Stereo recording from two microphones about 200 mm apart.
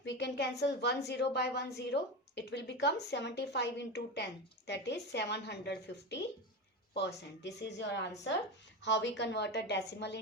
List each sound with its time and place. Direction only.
0.0 s a woman's voice: 60° left (ahead or behind)